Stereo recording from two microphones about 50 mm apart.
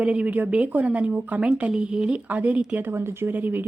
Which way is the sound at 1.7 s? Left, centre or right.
Centre.